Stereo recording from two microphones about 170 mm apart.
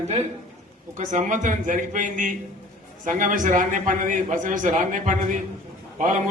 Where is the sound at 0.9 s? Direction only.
50° right (ahead or behind).